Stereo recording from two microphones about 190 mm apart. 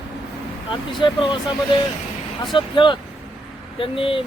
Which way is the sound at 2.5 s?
25° left (ahead or behind).